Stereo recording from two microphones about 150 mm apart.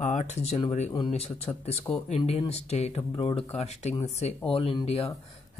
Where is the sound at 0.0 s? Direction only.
55° left (ahead or behind).